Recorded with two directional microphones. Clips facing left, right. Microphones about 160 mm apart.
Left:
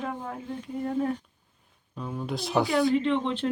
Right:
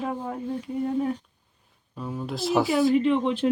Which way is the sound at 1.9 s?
5° right (ahead or behind).